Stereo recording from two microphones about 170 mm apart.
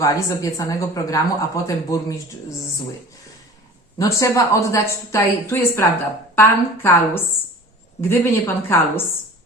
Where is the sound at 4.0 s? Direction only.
20° left (ahead or behind).